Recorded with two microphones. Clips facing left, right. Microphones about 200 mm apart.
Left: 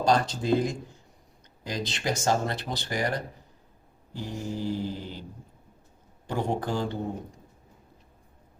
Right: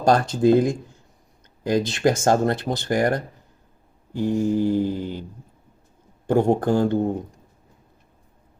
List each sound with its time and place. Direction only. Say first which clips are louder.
0.0 s speech: right 7 dB; 50° right (ahead or behind)
6.2 s speech: right 10 dB; 50° right (ahead or behind)